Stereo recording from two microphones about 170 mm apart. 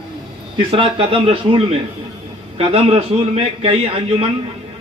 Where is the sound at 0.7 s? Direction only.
30° right (ahead or behind).